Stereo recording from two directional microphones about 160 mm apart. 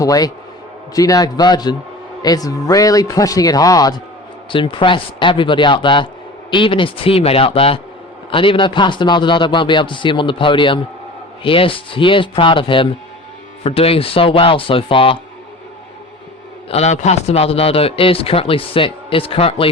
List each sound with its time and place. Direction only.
0.0 s a man's voice: 20° left (ahead or behind)
16.6 s a man's voice: 40° left (ahead or behind)